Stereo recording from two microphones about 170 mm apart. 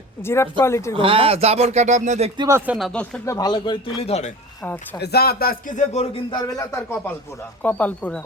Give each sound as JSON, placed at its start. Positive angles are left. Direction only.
{"t": 0.3, "sound": "speech", "side_deg": 15}
{"t": 0.9, "sound": "speech", "side_deg": -35}
{"t": 2.4, "sound": "speech", "side_deg": -15}
{"t": 2.7, "sound": "speech", "side_deg": 5}
{"t": 3.2, "sound": "a man's voice", "side_deg": 20}
{"t": 4.9, "sound": "a man's voice", "side_deg": 70}
{"t": 6.3, "sound": "speech", "side_deg": 20}